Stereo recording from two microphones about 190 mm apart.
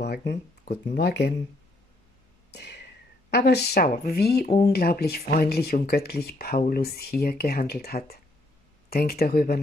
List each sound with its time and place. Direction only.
0.0 s speech: 60° left (ahead or behind)
2.5 s a sound: 65° left (ahead or behind)
3.3 s speech: 60° left (ahead or behind)